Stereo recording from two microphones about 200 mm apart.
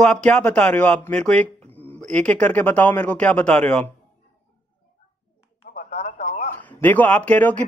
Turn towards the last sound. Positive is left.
turn(degrees=5)  # may be behind; listen again after turning